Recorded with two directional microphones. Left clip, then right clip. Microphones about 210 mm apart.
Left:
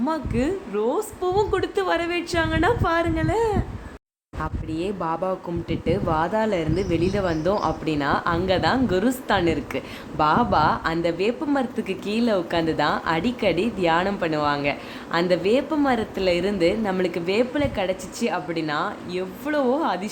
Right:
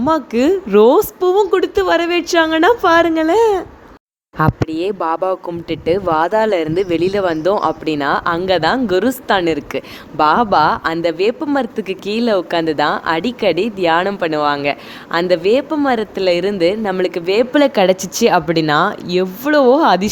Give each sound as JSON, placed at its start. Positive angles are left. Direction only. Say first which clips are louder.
{"t": 0.0, "sound": "a woman's voice", "louder": "right 10 dB", "side_deg": -35}